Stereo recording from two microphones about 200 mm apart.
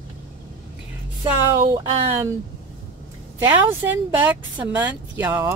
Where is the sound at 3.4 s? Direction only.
10° right (ahead or behind).